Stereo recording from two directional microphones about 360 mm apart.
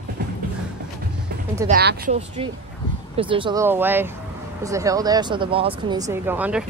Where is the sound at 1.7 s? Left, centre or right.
Right.